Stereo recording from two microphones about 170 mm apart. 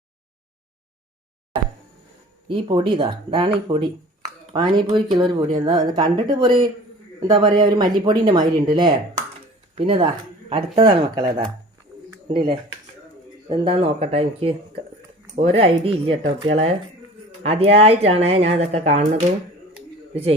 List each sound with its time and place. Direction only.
2.5 s speech: 30° right (ahead or behind)
13.5 s speech: 35° right (ahead or behind)